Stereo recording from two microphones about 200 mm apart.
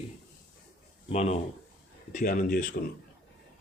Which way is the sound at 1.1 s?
30° left (ahead or behind).